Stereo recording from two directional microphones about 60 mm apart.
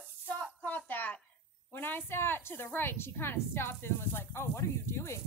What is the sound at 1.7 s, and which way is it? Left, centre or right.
A woman's voice, left.